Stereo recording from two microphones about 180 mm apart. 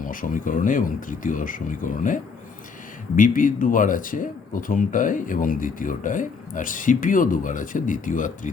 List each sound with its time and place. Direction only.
0.0 s speech: 50° left (ahead or behind)